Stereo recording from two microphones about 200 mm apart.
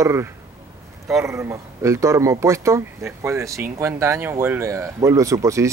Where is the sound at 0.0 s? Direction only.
15° right (ahead or behind).